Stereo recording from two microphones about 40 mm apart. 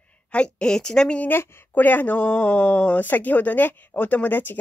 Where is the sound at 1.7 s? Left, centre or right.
Left.